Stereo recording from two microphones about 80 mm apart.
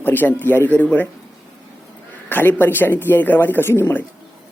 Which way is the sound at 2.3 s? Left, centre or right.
Left.